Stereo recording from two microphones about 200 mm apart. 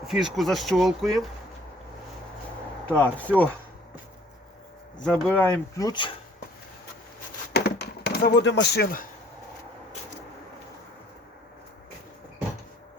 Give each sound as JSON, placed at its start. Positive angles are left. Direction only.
{"t": 0.1, "sound": "speech", "side_deg": 0}
{"t": 2.8, "sound": "speech", "side_deg": 10}
{"t": 5.0, "sound": "speech", "side_deg": 5}
{"t": 7.5, "sound": "a sound", "side_deg": 55}